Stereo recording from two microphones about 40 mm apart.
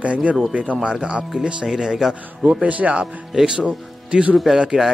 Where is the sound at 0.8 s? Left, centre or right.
Right.